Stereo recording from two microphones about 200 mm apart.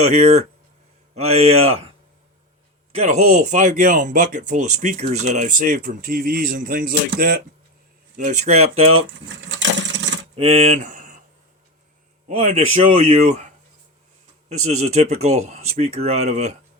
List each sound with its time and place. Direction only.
0.0 s speech: 35° right (ahead or behind)
2.9 s speech: 35° right (ahead or behind); by 7.4 s 50° right (ahead or behind)
8.1 s speech: 40° right (ahead or behind)
9.5 s a sound: 65° right (ahead or behind)
10.3 s speech: 30° right (ahead or behind)
12.3 s speech: 30° right (ahead or behind)
14.5 s speech: 35° right (ahead or behind)